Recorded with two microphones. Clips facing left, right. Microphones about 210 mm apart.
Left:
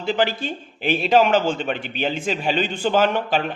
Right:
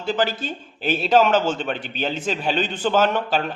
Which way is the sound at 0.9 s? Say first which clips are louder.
Even; 10° left (ahead or behind).